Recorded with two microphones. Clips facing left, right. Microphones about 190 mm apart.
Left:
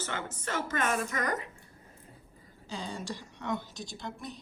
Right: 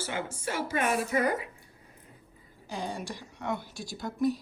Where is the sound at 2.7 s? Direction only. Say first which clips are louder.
Right 2 dB; 15° right (ahead or behind).